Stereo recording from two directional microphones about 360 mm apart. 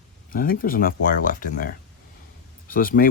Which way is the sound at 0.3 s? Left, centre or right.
Left.